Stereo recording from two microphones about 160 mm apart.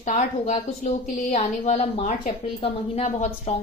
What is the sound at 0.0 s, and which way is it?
A woman's voice, 45° left (ahead or behind).